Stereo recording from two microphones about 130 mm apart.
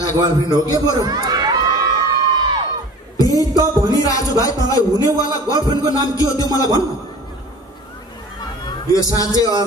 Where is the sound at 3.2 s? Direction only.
30° left (ahead or behind).